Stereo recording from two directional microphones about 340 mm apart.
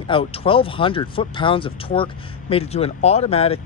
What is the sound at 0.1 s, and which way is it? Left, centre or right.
Speech, centre.